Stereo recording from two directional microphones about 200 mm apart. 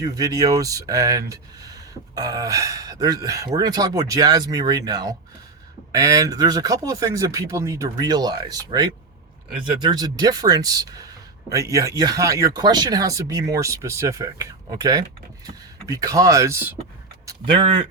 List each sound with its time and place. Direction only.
0.0 s speech: 20° right (ahead or behind)
17.2 s speech: 25° right (ahead or behind)